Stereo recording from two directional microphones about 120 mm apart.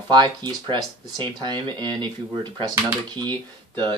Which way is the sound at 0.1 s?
35° right (ahead or behind).